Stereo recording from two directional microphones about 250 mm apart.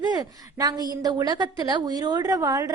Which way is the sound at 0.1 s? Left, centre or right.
Centre.